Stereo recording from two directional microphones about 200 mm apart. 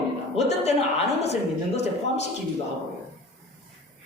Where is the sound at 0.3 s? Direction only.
35° left (ahead or behind).